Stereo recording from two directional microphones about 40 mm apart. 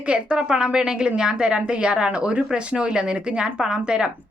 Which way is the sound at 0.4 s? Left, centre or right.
Right.